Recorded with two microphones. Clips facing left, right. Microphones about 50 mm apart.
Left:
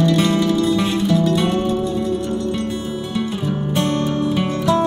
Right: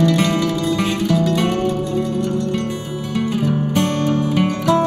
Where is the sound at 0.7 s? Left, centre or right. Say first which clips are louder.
Left 1 dB; right.